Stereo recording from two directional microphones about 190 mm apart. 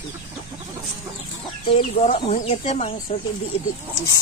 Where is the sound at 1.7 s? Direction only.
35° left (ahead or behind).